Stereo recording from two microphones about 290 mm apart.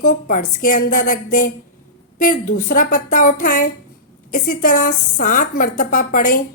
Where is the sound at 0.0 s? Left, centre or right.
Left.